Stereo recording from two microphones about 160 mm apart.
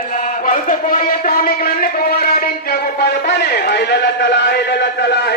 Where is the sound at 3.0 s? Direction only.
85° left.